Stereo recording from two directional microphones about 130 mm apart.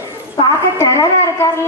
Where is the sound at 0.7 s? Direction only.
25° left (ahead or behind).